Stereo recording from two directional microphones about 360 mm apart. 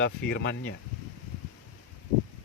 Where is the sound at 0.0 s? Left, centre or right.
Left.